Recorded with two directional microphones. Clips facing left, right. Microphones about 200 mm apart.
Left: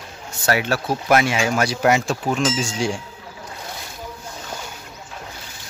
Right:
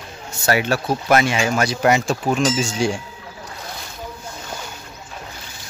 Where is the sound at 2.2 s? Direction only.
10° right (ahead or behind).